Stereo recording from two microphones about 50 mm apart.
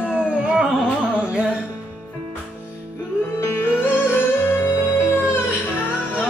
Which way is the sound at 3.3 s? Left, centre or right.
Left.